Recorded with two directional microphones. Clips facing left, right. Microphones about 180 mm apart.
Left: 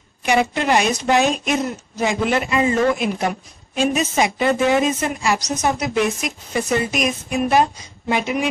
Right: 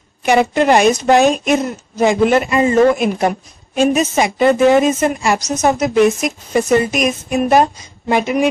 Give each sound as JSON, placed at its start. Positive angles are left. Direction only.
{"t": 0.2, "sound": "a woman's voice", "side_deg": -50}